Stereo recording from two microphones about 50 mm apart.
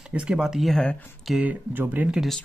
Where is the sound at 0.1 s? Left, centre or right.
Right.